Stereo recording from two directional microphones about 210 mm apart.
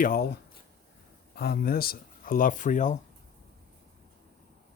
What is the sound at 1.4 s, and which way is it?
Speech, 45° left (ahead or behind).